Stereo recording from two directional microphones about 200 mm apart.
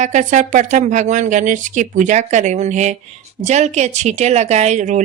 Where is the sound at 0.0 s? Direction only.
40° right (ahead or behind).